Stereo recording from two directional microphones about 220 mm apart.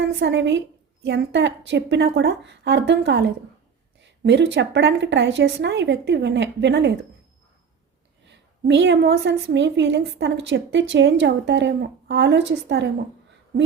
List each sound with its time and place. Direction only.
0.0 s a woman's voice: 55° right (ahead or behind)
8.3 s a woman's voice: 55° right (ahead or behind)